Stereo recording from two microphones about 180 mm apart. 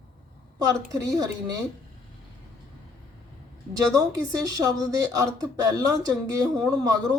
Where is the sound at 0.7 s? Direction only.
20° right (ahead or behind).